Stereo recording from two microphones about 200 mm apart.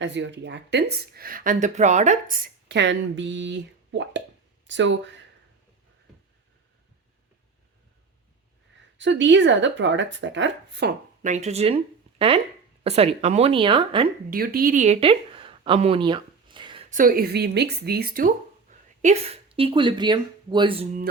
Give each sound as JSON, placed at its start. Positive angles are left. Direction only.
{"t": 0.0, "sound": "speech", "side_deg": -65}
{"t": 9.0, "sound": "speech", "side_deg": -65}
{"t": 11.2, "sound": "speech", "side_deg": -35}
{"t": 12.8, "sound": "speech", "side_deg": -30}
{"t": 14.3, "sound": "speech", "side_deg": -45}
{"t": 16.9, "sound": "speech", "side_deg": -45}
{"t": 19.0, "sound": "speech", "side_deg": -30}